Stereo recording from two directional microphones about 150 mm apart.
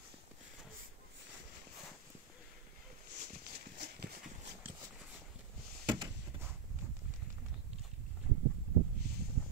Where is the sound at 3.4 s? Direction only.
90° right.